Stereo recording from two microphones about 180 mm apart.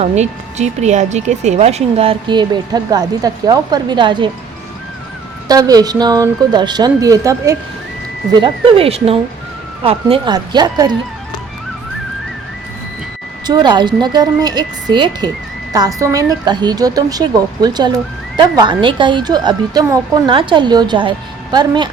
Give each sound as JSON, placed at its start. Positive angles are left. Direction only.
{"t": 0.0, "sound": "speech", "side_deg": -40}
{"t": 5.5, "sound": "speech", "side_deg": -20}
{"t": 13.5, "sound": "speech", "side_deg": -25}